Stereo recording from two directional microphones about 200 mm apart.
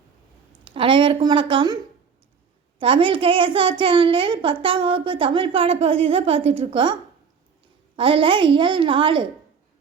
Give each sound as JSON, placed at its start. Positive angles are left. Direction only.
{"t": 0.6, "sound": "a woman's voice", "side_deg": -25}
{"t": 7.9, "sound": "a woman's voice", "side_deg": -25}